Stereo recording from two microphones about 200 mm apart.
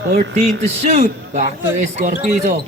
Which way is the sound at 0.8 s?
35° right (ahead or behind).